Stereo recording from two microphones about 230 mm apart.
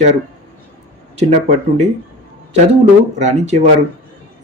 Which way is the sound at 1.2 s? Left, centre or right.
Right.